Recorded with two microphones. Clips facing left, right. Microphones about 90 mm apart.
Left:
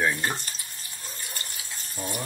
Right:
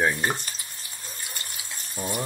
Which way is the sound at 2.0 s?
10° right (ahead or behind).